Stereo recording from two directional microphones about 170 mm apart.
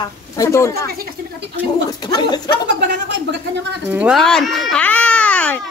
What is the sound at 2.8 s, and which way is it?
Speech, 90° right.